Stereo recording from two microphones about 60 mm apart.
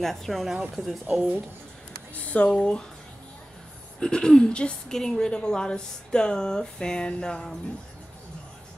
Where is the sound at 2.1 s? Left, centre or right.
Left.